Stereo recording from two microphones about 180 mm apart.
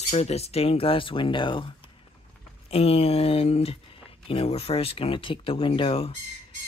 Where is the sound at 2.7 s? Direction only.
35° left (ahead or behind).